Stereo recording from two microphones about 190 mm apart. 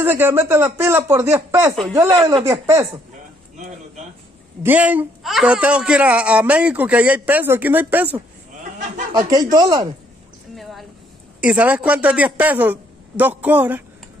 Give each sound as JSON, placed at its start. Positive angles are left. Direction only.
{"t": 0.0, "sound": "a man's voice", "side_deg": -10}
{"t": 4.6, "sound": "a man's voice", "side_deg": -10}
{"t": 9.3, "sound": "speech", "side_deg": -20}
{"t": 10.5, "sound": "a sound", "side_deg": 0}
{"t": 11.4, "sound": "a man's voice", "side_deg": -5}